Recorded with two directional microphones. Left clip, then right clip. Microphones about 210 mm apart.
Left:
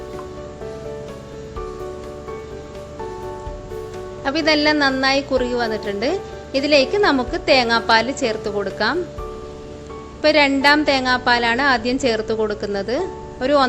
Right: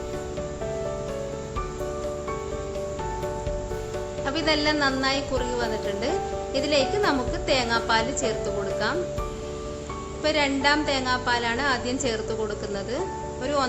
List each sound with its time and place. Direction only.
4.2 s a woman's voice: 30° left (ahead or behind)
10.2 s a woman's voice: 30° left (ahead or behind)